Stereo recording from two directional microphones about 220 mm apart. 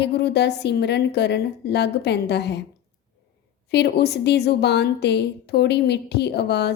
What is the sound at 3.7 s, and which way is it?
A woman's voice, 50° left (ahead or behind).